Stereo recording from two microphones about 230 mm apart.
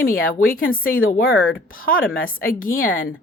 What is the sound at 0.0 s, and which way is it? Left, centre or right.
A woman's voice, left.